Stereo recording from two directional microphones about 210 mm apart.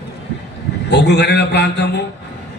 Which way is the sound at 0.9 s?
55° left (ahead or behind).